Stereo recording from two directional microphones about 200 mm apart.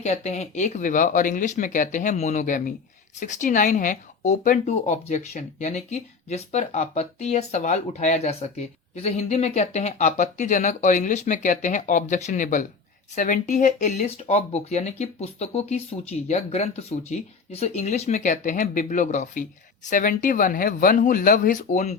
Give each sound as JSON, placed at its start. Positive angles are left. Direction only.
{"t": 0.0, "sound": "speech", "side_deg": 35}